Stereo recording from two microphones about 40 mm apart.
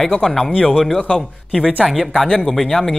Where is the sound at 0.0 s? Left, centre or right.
Centre.